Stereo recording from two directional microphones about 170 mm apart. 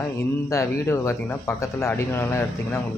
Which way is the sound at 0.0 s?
15° left (ahead or behind).